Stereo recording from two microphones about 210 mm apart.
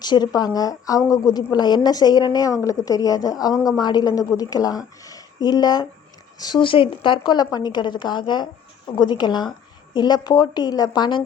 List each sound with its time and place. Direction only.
0.0 s a woman's voice: 20° left (ahead or behind)